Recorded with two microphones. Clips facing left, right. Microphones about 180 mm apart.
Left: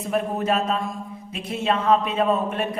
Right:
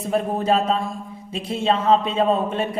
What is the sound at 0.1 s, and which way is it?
A woman's voice, 30° right (ahead or behind).